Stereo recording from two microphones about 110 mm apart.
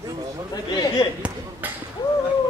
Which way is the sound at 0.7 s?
35° left (ahead or behind).